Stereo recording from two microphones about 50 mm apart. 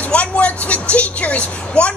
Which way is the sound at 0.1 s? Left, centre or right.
Left.